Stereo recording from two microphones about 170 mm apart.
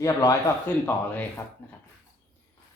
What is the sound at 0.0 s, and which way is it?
Speech, 20° left (ahead or behind).